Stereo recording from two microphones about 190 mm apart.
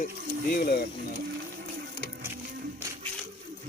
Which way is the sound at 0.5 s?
55° left (ahead or behind).